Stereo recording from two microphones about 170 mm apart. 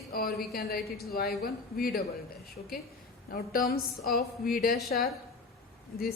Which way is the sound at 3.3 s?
60° left (ahead or behind).